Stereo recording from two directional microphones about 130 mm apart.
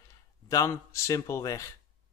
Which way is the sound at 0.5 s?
25° left (ahead or behind).